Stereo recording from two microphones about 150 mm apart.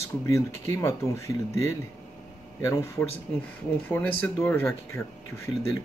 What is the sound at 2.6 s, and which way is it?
Speech, 20° left (ahead or behind).